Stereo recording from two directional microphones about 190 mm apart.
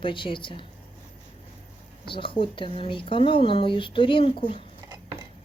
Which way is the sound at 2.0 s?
25° left (ahead or behind).